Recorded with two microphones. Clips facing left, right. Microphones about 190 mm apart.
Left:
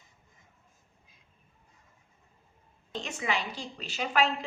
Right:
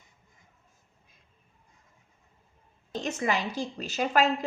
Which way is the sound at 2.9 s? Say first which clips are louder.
Right 4 dB; 40° right (ahead or behind).